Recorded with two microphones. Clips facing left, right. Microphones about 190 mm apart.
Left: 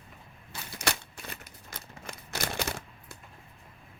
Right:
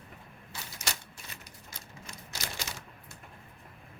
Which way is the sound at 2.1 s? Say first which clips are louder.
Left 7 dB; 55° left (ahead or behind).